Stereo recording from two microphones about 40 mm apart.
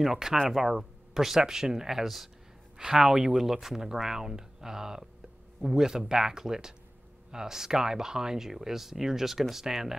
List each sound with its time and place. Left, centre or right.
0.0 s speech: centre
2.8 s speech: centre
3.6 s speech: centre